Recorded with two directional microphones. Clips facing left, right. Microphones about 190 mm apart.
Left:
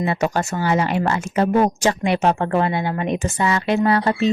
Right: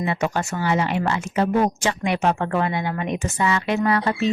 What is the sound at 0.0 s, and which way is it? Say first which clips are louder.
Speech: left 3 dB; 40° left (ahead or behind).